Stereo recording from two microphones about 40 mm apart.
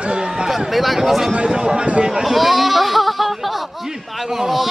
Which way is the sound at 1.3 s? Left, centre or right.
Right.